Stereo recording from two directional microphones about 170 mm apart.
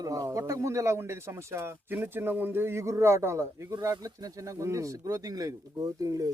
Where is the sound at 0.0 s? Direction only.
20° right (ahead or behind).